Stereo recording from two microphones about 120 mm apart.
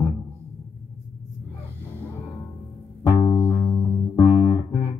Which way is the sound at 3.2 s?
20° left (ahead or behind).